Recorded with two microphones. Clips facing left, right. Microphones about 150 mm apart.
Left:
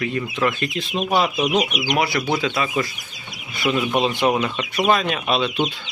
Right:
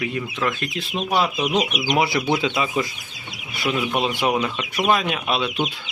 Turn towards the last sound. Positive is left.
turn(degrees=-5)  # may be behind; listen again after turning